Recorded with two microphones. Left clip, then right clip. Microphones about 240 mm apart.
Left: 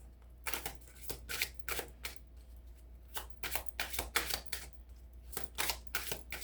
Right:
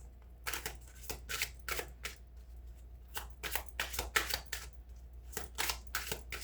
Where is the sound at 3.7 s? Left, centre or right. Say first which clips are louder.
Right 3 dB; centre.